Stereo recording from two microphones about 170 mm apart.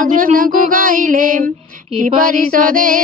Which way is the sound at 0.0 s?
55° right (ahead or behind).